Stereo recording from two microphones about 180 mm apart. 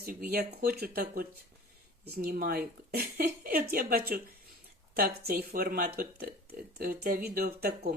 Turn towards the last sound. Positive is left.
turn(degrees=-55)  # may be behind; listen again after turning